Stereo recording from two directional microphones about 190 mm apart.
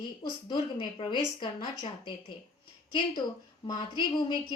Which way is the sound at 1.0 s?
25° left (ahead or behind).